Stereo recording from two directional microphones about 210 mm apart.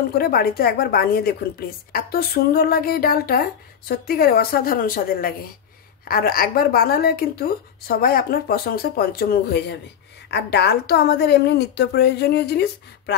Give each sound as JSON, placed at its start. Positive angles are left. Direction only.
{"t": 0.1, "sound": "a woman's voice", "side_deg": 45}